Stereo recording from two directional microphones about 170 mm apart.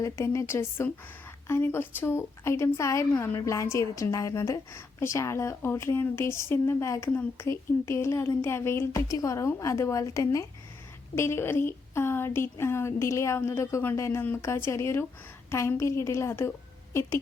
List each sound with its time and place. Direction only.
0.0 s a woman's voice: 15° left (ahead or behind)